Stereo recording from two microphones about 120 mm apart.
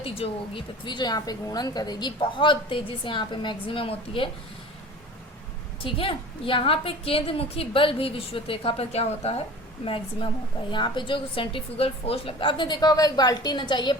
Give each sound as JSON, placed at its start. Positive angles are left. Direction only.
{"t": 0.0, "sound": "a woman's voice", "side_deg": 50}
{"t": 5.8, "sound": "a woman's voice", "side_deg": 50}
{"t": 9.8, "sound": "a woman's voice", "side_deg": 50}